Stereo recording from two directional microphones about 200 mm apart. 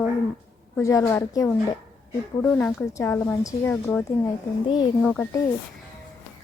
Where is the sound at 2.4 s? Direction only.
5° left (ahead or behind).